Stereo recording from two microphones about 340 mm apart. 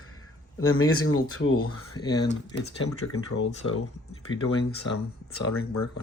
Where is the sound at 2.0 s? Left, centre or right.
Centre.